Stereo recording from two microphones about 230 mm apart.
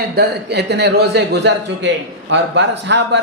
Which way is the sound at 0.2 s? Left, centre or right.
Right.